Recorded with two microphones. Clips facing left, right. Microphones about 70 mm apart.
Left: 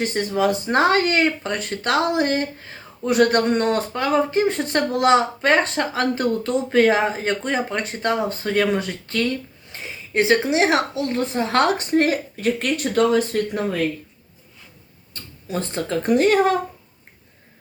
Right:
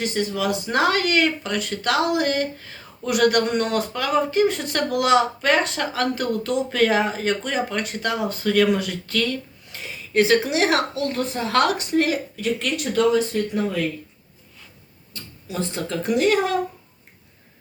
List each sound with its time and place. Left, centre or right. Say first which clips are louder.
0.0 s speech: left 3 dB; left
15.1 s speech: left 3 dB; left